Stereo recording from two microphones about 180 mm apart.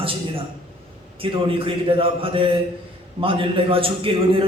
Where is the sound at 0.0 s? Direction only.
30° right (ahead or behind).